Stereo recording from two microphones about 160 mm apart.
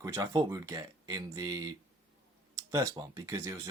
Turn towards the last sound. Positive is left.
turn(degrees=-20)  # may be behind; listen again after turning